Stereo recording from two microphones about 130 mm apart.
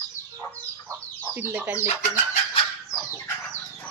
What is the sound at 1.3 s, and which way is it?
Speech, 10° right (ahead or behind).